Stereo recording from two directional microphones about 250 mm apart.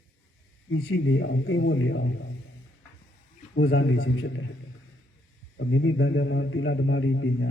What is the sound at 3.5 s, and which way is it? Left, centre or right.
Speech, left.